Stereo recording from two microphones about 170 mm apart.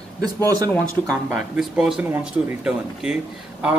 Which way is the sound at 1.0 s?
Centre (ahead or behind).